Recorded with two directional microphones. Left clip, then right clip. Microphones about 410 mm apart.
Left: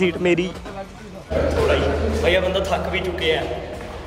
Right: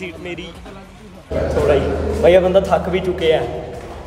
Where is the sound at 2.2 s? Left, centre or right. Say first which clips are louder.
Right 8 dB; centre.